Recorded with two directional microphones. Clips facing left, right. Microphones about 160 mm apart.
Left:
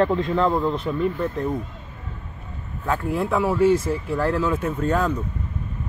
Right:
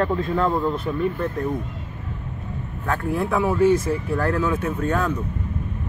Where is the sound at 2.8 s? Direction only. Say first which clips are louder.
Even; 10° left (ahead or behind).